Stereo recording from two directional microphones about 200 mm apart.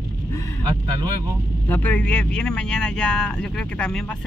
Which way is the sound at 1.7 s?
10° left (ahead or behind).